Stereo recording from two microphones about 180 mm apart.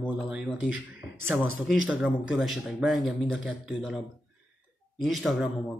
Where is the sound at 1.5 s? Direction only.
Centre (ahead or behind).